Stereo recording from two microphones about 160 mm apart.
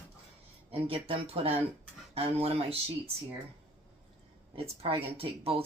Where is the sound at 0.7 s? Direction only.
35° right (ahead or behind).